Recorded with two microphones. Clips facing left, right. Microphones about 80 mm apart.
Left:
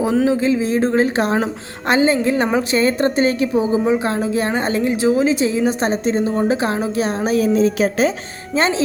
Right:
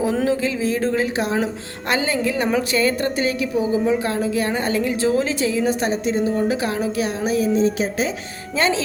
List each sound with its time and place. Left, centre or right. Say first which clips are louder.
0.3 s a woman's voice: left 4 dB; left
1.0 s speech: left 4 dB; left
1.9 s a woman's voice: left 6 dB; left
4.9 s a woman's voice: left 4 dB; centre; by 7.3 s left
7.3 s a sound: left 3 dB; left
8.5 s a woman's voice: left 2 dB; left